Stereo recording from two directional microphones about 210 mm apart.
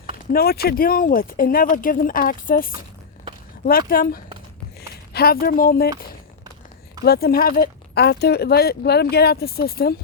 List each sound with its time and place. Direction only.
0.3 s speech: 45° left (ahead or behind)
7.0 s speech: 45° left (ahead or behind)